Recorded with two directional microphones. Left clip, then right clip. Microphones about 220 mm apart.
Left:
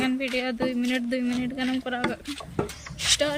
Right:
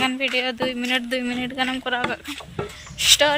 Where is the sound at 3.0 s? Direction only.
5° left (ahead or behind).